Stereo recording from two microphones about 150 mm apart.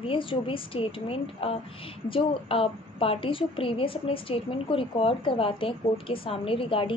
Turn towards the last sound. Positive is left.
turn(degrees=35)  # may be behind; listen again after turning